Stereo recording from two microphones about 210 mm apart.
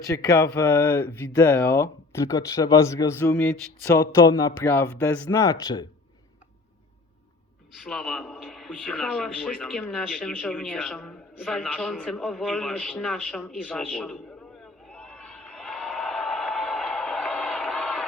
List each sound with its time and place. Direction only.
0.1 s speech: 15° left (ahead or behind)
7.9 s a man's voice: centre (ahead or behind)
14.8 s a sound: centre (ahead or behind)